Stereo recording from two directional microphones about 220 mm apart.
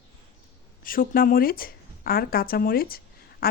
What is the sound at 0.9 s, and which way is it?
Speech, 40° left (ahead or behind).